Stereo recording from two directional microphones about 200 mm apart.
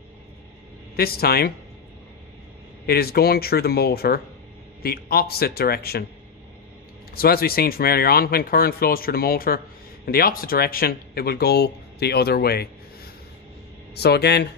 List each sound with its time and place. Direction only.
0.9 s speech: 50° left (ahead or behind)
2.9 s speech: 50° left (ahead or behind)
7.2 s speech: 50° left (ahead or behind)